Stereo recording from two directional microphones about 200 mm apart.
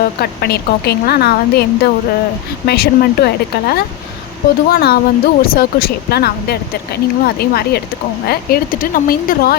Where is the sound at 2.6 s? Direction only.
50° left (ahead or behind).